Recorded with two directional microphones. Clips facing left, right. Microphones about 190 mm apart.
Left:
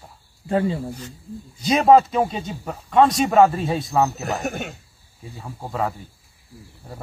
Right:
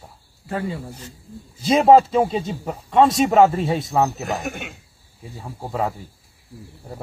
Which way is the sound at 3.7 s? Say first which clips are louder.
Even; centre (ahead or behind).